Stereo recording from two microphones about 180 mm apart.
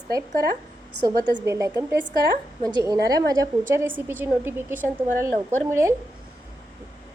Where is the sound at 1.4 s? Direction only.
15° right (ahead or behind).